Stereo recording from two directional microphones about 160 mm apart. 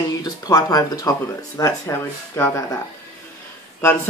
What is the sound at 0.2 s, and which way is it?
Speech, 25° left (ahead or behind).